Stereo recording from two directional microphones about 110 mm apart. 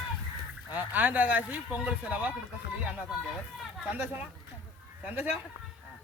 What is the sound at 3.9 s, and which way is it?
A man's voice, 15° right (ahead or behind).